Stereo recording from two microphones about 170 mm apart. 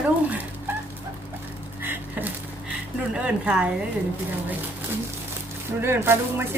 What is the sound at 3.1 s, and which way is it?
Speech, 5° right (ahead or behind).